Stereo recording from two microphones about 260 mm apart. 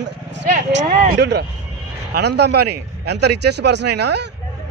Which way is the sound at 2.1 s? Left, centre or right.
Right.